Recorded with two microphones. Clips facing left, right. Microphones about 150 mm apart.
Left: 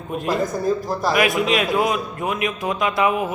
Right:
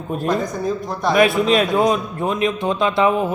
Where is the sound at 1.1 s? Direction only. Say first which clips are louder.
Right 5 dB; 30° right (ahead or behind).